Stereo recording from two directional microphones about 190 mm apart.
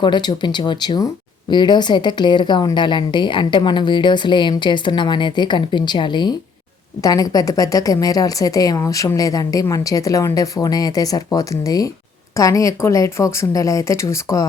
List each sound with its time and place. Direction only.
0.0 s a woman's voice: 20° left (ahead or behind)